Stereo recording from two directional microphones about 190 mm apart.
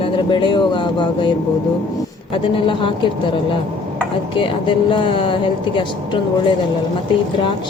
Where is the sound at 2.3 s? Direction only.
25° left (ahead or behind).